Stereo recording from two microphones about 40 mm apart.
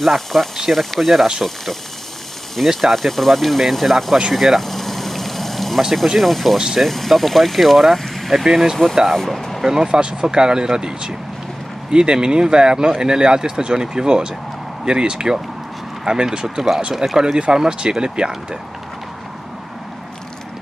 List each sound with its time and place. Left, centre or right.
0.0 s speech: centre
2.8 s speech: centre
4.3 s boiling: centre
6.1 s speech: centre
8.8 s speech: centre
9.6 s speech: centre
16.4 s speech: centre
17.3 s speech: centre